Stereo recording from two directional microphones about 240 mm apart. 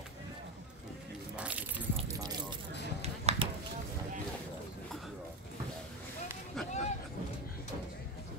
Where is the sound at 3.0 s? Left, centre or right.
Right.